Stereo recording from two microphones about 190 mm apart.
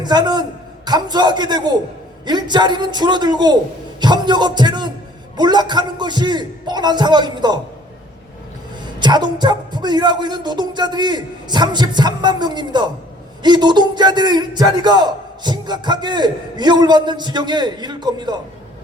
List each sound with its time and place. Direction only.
0.0 s a man's voice: 20° right (ahead or behind)
8.8 s a man's voice: 25° right (ahead or behind)